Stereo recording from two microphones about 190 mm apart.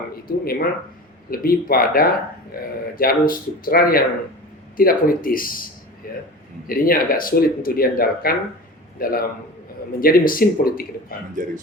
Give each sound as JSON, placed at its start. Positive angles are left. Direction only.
{"t": 0.3, "sound": "a man's voice", "side_deg": 50}
{"t": 11.4, "sound": "speech", "side_deg": -45}